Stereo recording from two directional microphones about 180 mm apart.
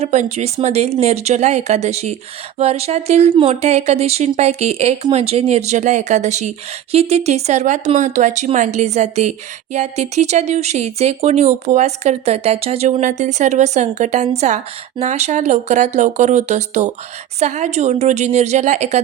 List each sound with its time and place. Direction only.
0.0 s speech: 35° right (ahead or behind)